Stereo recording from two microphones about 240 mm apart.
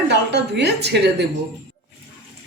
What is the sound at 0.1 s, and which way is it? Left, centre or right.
Speech, right.